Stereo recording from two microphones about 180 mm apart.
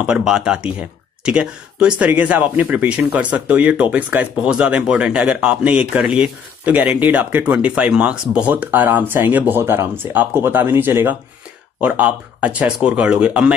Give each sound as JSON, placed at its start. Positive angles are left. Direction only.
{"t": 0.0, "sound": "speech", "side_deg": -5}